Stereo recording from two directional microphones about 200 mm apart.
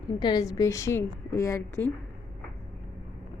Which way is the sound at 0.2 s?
20° left (ahead or behind).